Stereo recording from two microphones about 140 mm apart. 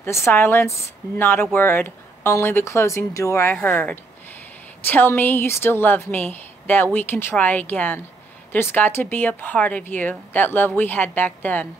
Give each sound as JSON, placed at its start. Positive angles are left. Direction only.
{"t": 0.0, "sound": "speech", "side_deg": 15}